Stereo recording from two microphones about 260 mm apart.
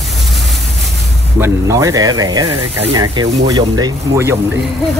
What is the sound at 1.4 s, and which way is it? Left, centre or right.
Speech, centre.